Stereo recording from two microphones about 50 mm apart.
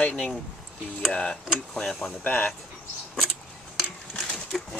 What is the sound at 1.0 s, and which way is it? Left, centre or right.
Speech, centre.